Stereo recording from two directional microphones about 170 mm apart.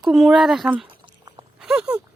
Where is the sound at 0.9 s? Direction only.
25° right (ahead or behind).